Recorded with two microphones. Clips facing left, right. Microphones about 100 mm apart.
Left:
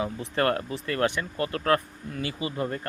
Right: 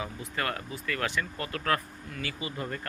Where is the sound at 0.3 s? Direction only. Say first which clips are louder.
Left 8 dB; 40° left (ahead or behind).